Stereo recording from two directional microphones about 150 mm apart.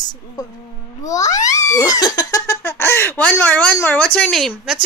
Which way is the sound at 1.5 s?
20° left (ahead or behind).